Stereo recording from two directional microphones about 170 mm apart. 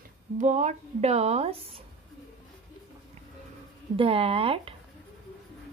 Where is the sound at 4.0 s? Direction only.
35° right (ahead or behind).